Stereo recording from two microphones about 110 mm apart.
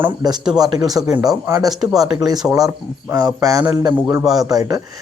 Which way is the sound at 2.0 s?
35° right (ahead or behind).